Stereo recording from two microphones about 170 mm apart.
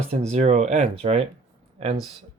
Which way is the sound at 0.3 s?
40° right (ahead or behind).